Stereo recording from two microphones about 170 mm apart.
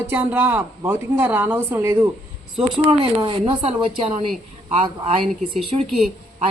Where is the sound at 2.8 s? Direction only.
30° right (ahead or behind).